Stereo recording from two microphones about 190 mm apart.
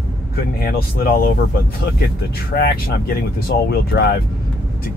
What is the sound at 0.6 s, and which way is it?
Speech, 50° left (ahead or behind).